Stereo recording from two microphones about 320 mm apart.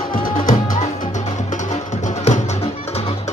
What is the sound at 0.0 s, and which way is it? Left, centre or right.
Music, left.